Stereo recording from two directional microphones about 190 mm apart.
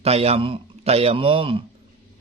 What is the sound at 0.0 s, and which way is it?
Speech, 30° right (ahead or behind).